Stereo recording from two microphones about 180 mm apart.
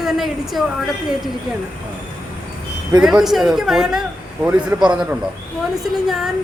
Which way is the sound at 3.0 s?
5° right (ahead or behind).